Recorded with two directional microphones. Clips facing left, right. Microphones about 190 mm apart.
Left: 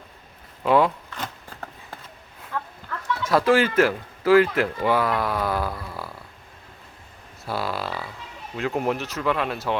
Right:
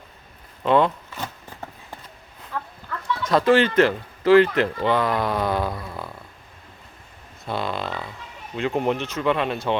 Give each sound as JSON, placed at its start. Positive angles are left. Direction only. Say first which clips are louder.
{"t": 0.6, "sound": "speech", "louder": "even", "side_deg": 5}
{"t": 1.1, "sound": "a sound", "louder": "right 1 dB", "side_deg": -15}
{"t": 3.2, "sound": "speech", "louder": "right 1 dB", "side_deg": 5}
{"t": 7.4, "sound": "speech", "louder": "right 1 dB", "side_deg": 5}